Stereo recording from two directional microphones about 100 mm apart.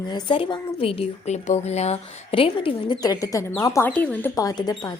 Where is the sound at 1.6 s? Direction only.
90° left; by 3.0 s 60° left (ahead or behind).